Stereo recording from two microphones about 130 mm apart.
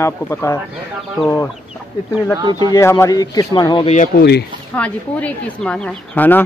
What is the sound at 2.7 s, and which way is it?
Speech, 20° left (ahead or behind).